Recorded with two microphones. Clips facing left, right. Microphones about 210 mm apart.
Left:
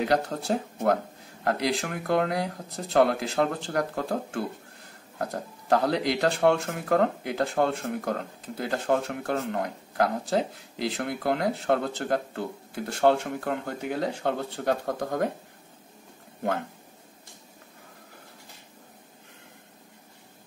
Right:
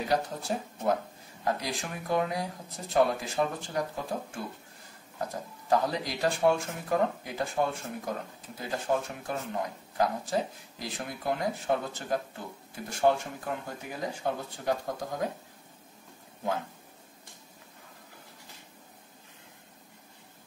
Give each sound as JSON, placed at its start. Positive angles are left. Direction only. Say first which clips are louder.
{"t": 0.0, "sound": "speech", "louder": "left 4 dB", "side_deg": 70}